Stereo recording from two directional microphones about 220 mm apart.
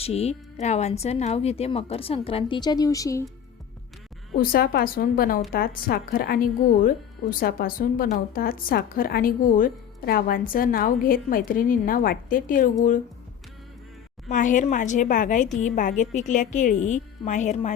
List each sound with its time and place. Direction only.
0.0 s speech: 30° left (ahead or behind)
4.4 s speech: 40° left (ahead or behind)
14.3 s speech: 35° left (ahead or behind)